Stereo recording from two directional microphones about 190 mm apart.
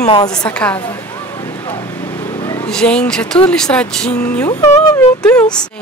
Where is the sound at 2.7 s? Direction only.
5° left (ahead or behind).